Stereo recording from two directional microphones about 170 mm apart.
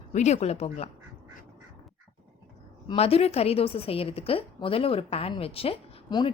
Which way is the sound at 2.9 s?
35° left (ahead or behind).